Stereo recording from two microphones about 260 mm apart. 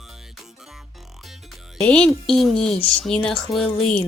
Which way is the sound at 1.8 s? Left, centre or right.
Centre.